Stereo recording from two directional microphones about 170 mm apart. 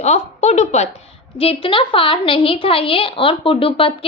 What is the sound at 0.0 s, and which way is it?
A woman's voice, 40° left (ahead or behind).